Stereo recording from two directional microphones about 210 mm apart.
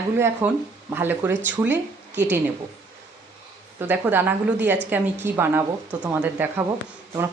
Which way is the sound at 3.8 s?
10° right (ahead or behind).